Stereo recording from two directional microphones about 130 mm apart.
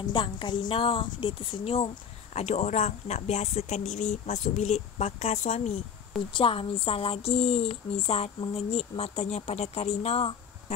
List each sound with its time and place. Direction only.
0.1 s speech: 35° left (ahead or behind)
2.3 s speech: 60° left (ahead or behind)
6.1 s speech: 40° left (ahead or behind)